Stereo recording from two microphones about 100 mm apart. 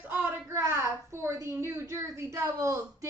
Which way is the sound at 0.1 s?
20° right (ahead or behind).